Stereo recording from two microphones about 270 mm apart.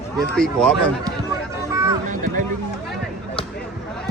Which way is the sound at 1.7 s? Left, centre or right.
Centre.